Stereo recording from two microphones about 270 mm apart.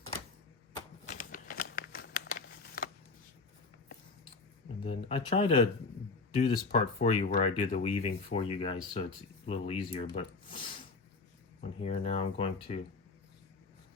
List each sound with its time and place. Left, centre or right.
1.0 s crumpling: left
4.8 s speech: centre
10.2 s a sound: centre
11.8 s speech: left